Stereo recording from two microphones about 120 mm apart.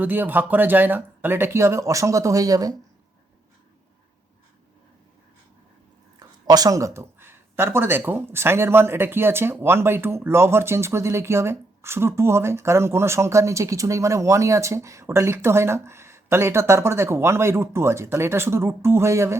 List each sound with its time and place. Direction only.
0.0 s speech: 15° right (ahead or behind)
6.1 s speech: 35° right (ahead or behind)